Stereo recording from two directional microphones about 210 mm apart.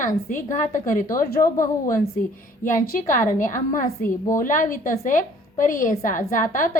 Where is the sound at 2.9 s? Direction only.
40° left (ahead or behind).